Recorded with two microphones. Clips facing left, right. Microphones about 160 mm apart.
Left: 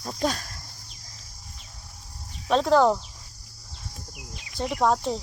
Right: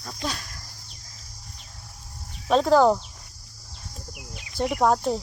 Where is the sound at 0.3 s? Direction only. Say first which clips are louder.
Left 3 dB; 40° left (ahead or behind).